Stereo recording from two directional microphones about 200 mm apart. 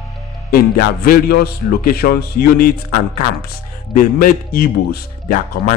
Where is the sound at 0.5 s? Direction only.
45° left (ahead or behind).